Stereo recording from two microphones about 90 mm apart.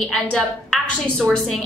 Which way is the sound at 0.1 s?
5° left (ahead or behind).